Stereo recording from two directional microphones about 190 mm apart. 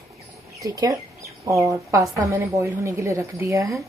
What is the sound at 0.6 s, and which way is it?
A woman's voice, 20° right (ahead or behind).